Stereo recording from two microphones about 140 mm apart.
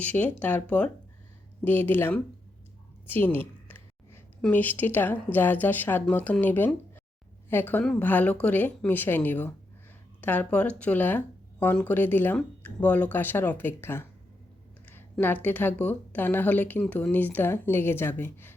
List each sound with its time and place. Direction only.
0.0 s speech: 10° left (ahead or behind)
3.1 s a sound: 15° left (ahead or behind)
4.4 s speech: 15° left (ahead or behind)
15.2 s speech: 15° left (ahead or behind)